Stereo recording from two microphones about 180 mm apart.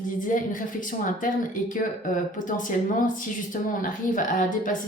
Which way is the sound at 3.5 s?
45° left (ahead or behind).